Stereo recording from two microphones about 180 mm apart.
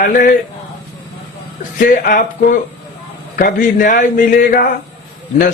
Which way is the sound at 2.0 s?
50° left (ahead or behind).